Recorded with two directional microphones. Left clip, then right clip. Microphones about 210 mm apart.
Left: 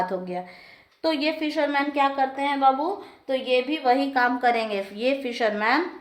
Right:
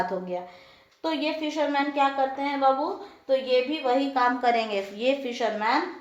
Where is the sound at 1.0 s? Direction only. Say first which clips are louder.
Left 3 dB; 40° left (ahead or behind).